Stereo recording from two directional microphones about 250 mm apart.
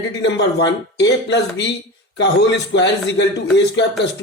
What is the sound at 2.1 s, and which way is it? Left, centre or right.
Speech, left.